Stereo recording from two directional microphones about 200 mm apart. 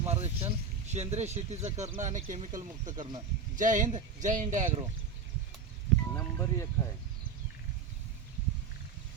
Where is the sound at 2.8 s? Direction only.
20° right (ahead or behind).